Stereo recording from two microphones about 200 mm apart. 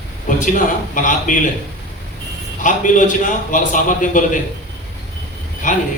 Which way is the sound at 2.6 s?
40° left (ahead or behind).